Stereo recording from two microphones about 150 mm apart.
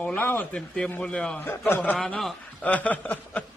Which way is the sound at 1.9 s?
Centre (ahead or behind).